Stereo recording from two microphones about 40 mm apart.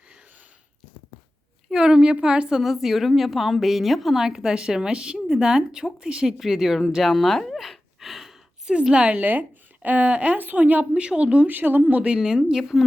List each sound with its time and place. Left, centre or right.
1.7 s speech: right
2.6 s a woman's voice: centre
4.2 s a woman's voice: centre
6.4 s a woman's voice: centre
6.9 s a sound: centre
8.9 s speech: right
9.1 s a woman's voice: right
10.3 s a woman's voice: right
10.9 s speech: right
11.4 s a woman's voice: right
11.9 s a woman's voice: right
12.1 s a woman's voice: centre